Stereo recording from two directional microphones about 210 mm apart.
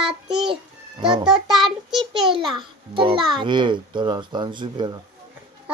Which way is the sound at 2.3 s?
20° right (ahead or behind).